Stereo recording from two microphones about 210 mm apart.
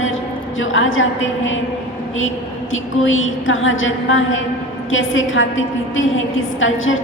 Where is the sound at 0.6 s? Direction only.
65° left (ahead or behind).